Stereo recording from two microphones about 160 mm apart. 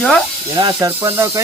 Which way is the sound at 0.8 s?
15° right (ahead or behind).